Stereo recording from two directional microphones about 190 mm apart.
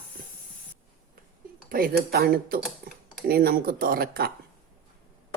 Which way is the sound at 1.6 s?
50° right (ahead or behind).